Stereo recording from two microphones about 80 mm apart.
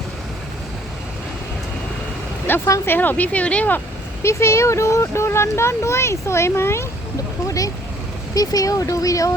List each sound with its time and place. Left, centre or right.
2.5 s speech: left
4.2 s speech: left
7.4 s vehicle: left
8.4 s speech: left